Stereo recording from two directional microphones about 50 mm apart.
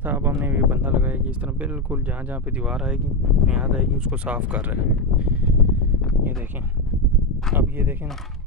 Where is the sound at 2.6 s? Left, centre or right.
Centre.